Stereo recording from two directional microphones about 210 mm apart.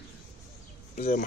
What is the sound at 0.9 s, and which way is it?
Speech, 40° left (ahead or behind).